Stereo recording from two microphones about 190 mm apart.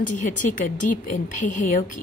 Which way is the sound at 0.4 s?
40° left (ahead or behind).